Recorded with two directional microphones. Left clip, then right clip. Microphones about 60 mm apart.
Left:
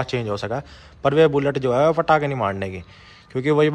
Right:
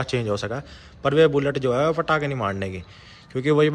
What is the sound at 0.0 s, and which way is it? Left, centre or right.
Speech, right.